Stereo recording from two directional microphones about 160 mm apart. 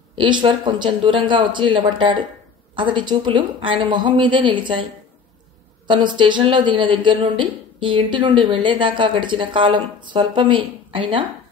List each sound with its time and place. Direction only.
0.1 s a man's voice: 30° right (ahead or behind)
5.9 s a man's voice: 30° right (ahead or behind)